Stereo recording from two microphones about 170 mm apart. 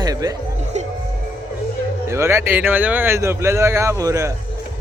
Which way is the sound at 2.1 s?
15° right (ahead or behind).